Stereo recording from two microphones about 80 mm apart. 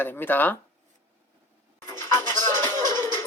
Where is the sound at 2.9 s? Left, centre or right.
Left.